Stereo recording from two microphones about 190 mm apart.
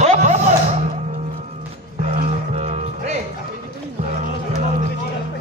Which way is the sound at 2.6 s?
35° right (ahead or behind).